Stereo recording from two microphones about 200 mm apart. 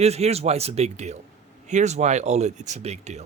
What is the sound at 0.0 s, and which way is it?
Speech, 30° right (ahead or behind).